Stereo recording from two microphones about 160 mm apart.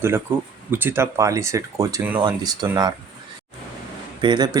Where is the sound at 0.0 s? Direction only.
15° right (ahead or behind).